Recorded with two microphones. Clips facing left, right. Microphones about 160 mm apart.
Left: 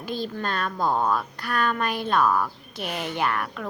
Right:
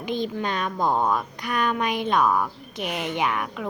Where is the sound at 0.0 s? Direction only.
15° right (ahead or behind).